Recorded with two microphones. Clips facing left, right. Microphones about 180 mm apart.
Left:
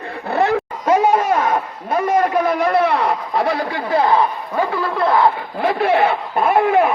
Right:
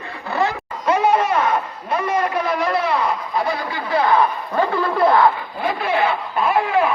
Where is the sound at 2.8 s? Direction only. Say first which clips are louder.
Left 3 dB; 70° left (ahead or behind).